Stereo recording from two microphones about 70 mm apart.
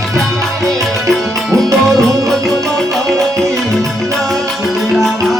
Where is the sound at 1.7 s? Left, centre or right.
Right.